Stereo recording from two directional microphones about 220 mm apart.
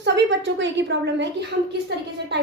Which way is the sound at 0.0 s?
55° right (ahead or behind).